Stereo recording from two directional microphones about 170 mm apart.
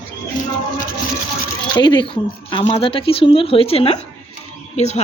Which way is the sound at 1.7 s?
25° left (ahead or behind).